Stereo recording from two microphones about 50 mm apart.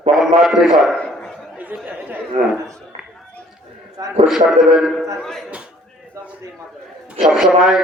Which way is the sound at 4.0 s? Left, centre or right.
Right.